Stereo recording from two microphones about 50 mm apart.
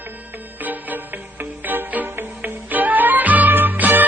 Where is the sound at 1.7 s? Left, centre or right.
Right.